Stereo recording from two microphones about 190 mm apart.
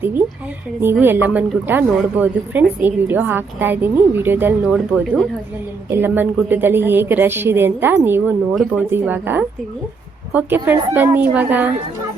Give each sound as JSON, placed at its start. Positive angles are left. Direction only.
{"t": 0.8, "sound": "speech", "side_deg": -10}